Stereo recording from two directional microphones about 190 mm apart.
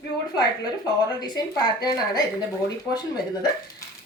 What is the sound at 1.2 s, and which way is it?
A woman's voice, 20° left (ahead or behind).